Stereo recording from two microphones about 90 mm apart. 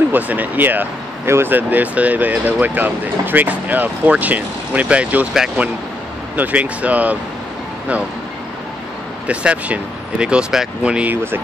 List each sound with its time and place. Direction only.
0.1 s speech: 20° right (ahead or behind)
6.3 s speech: 15° right (ahead or behind)
9.3 s speech: 15° right (ahead or behind)